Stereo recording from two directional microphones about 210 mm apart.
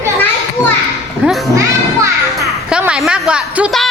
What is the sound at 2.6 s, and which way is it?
A woman's voice, 5° right (ahead or behind).